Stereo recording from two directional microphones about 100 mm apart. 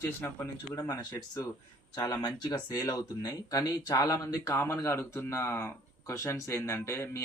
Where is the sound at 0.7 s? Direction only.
40° left (ahead or behind).